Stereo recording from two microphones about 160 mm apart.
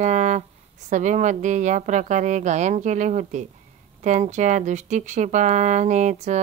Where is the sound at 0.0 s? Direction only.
45° right (ahead or behind).